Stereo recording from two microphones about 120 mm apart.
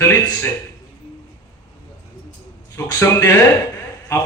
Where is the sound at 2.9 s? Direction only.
30° left (ahead or behind).